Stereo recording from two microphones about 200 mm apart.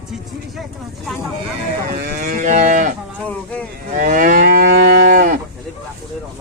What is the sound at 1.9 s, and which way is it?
Moo, 45° right (ahead or behind).